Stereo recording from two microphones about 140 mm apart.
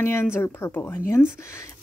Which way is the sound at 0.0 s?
15° left (ahead or behind).